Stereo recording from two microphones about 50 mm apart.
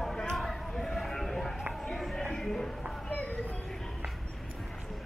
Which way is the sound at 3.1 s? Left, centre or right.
Left.